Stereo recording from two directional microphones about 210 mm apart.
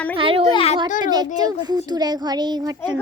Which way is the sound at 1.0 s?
20° right (ahead or behind).